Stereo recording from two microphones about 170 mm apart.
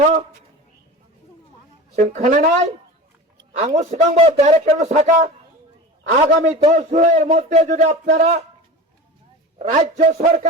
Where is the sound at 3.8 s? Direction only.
45° right (ahead or behind).